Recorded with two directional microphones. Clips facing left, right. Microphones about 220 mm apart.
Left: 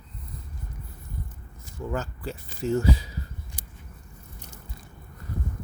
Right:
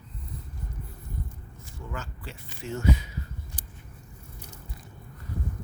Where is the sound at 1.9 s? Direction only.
40° left (ahead or behind).